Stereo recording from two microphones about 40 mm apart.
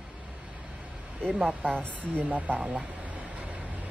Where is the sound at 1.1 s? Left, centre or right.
Right.